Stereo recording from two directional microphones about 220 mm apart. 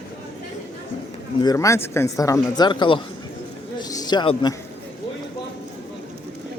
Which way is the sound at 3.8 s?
15° left (ahead or behind).